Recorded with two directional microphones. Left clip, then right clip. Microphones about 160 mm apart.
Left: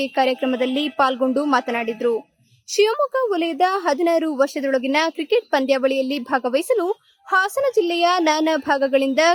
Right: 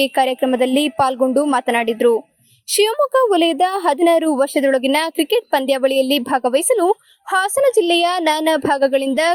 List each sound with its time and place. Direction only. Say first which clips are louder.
0.0 s a woman's voice: right 4 dB; 30° right (ahead or behind)